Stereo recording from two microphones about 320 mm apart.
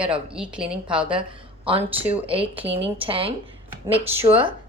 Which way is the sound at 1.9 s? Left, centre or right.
Centre.